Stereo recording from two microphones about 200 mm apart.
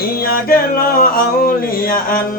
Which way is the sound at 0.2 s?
45° left (ahead or behind).